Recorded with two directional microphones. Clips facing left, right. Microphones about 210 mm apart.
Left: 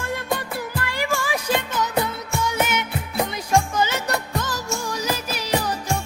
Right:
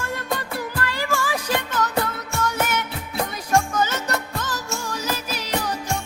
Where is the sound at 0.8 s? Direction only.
15° left (ahead or behind).